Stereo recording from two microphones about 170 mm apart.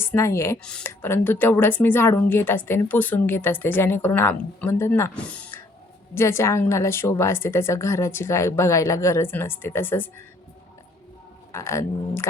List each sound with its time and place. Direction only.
0.0 s speech: 15° left (ahead or behind)
11.5 s speech: 15° left (ahead or behind)